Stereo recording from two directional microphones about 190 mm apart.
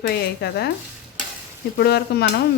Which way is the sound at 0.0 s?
55° left (ahead or behind).